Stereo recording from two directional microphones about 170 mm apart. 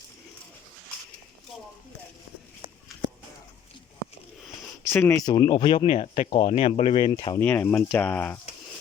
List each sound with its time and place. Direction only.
4.8 s speech: 15° left (ahead or behind)
7.4 s speech: 10° left (ahead or behind)